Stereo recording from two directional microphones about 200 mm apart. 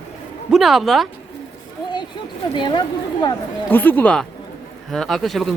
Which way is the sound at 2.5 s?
25° left (ahead or behind).